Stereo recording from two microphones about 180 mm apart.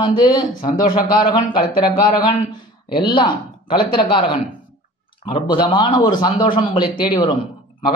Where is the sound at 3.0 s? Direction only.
30° left (ahead or behind).